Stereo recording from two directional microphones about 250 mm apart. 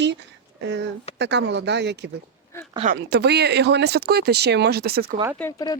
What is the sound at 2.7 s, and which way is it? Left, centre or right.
Speech, right.